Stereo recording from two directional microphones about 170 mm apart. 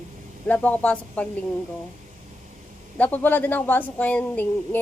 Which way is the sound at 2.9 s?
10° left (ahead or behind).